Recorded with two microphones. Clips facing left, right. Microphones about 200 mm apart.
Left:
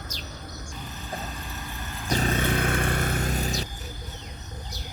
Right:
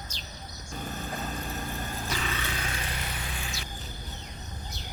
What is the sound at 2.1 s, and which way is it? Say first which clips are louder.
Vehicle: left 13 dB; 45° left (ahead or behind).